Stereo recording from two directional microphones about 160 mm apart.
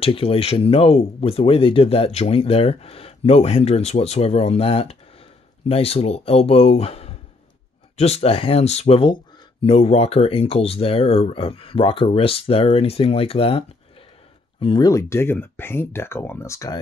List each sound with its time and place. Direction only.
0.0 s speech: 35° left (ahead or behind)